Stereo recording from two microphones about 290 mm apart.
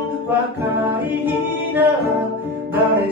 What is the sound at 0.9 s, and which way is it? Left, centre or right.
Music, centre.